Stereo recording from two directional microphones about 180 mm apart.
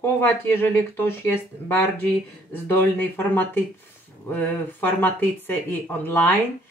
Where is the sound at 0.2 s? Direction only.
10° left (ahead or behind).